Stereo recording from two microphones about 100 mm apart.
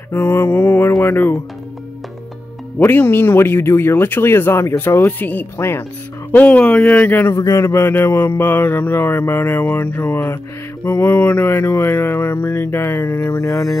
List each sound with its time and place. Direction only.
0.1 s mantra: 20° left (ahead or behind)
1.0 s speech: 20° left (ahead or behind)
2.8 s speech: 20° left (ahead or behind)
7.3 s speech: 30° left (ahead or behind)